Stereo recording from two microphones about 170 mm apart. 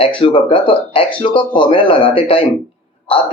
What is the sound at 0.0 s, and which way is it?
Speech, 30° left (ahead or behind).